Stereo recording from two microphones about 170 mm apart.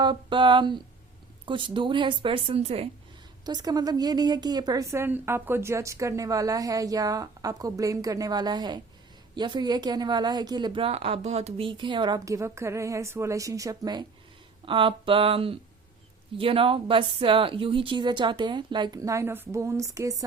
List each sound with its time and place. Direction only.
0.0 s a woman's voice: 30° right (ahead or behind)
3.4 s a woman's voice: 25° right (ahead or behind)